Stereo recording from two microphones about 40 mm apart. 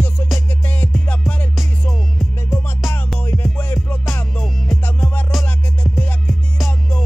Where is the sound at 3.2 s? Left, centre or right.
Left.